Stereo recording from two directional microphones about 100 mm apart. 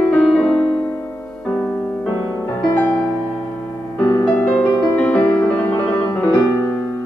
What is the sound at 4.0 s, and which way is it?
Music, 25° left (ahead or behind).